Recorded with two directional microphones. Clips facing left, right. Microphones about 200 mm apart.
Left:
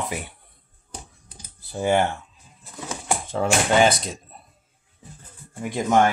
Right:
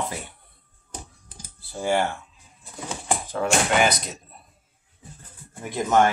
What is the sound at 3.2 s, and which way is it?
Speech, 25° left (ahead or behind).